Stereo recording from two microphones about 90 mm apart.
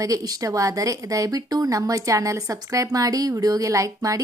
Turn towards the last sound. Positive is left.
turn(degrees=-40)  # may be behind; listen again after turning